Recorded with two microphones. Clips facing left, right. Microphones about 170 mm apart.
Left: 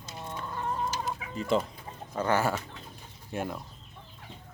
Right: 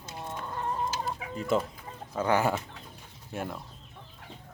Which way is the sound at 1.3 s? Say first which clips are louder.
Even; 5° right (ahead or behind).